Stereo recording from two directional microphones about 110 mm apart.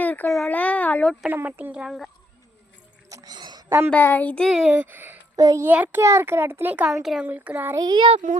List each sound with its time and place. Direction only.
0.0 s a sound: 15° left (ahead or behind)
0.3 s speech: centre (ahead or behind)
0.5 s a child's voice: 15° left (ahead or behind)
1.3 s speech: 15° right (ahead or behind)
3.1 s a sound: 30° right (ahead or behind)
3.3 s a sound: 40° right (ahead or behind)
3.8 s a child's voice: 15° left (ahead or behind)
4.4 s speech: 5° right (ahead or behind)
4.7 s speech: 15° right (ahead or behind)
5.4 s a child's voice: 30° right (ahead or behind)
5.6 s a child's voice: 15° right (ahead or behind)
7.0 s speech: 5° right (ahead or behind)
7.3 s speech: 15° right (ahead or behind)
7.8 s a child's voice: 40° right (ahead or behind)